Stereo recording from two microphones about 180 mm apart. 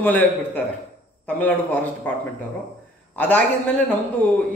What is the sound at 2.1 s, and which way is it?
A man's voice, 10° left (ahead or behind).